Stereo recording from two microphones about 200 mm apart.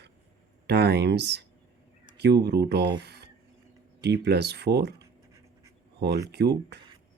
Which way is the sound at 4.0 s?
55° right (ahead or behind).